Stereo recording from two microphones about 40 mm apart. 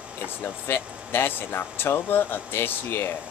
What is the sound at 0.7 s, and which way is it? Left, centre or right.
Speech, left.